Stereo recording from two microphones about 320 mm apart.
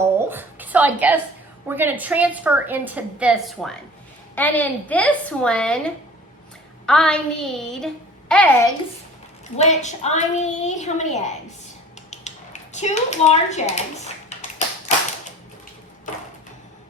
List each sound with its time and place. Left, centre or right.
0.3 s a woman's voice: centre
9.6 s a woman's voice: left
12.1 s a sound: left